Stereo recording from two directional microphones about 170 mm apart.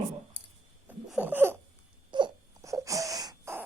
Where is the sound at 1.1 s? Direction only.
10° right (ahead or behind).